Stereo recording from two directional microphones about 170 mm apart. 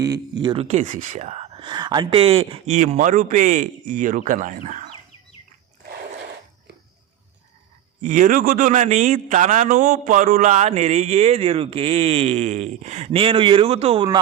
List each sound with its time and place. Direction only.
0.4 s a man's voice: 35° right (ahead or behind)
8.0 s a man's voice: 50° right (ahead or behind); by 14.2 s 30° right (ahead or behind)